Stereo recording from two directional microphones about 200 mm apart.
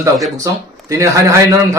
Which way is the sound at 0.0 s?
15° right (ahead or behind).